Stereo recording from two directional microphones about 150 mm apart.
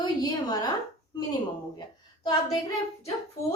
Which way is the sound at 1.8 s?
25° left (ahead or behind).